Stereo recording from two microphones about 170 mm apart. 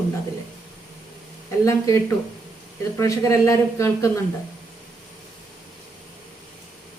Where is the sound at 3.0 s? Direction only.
15° left (ahead or behind).